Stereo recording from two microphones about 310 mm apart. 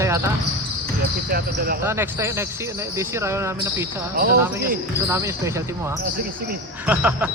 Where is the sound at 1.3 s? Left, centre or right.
Right.